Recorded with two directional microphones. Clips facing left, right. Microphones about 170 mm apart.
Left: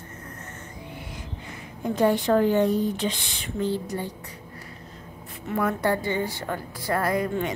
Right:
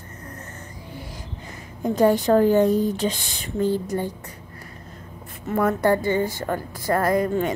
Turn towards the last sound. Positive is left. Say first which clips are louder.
# right 4 dB
turn(degrees=-45)  # may be behind; listen again after turning